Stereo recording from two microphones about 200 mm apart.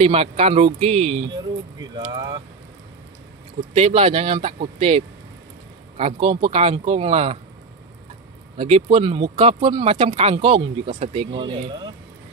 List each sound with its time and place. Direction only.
0.0 s speech: 30° right (ahead or behind)
3.7 s speech: 30° right (ahead or behind)
8.5 s speech: 30° right (ahead or behind)